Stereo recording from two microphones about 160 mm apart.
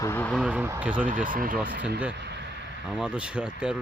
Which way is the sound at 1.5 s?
5° right (ahead or behind).